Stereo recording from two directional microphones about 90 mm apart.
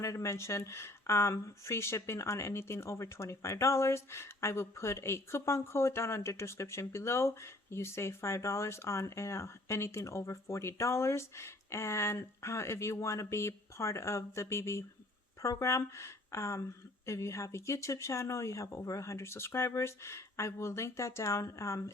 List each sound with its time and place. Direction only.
0.0 s speech: 35° left (ahead or behind)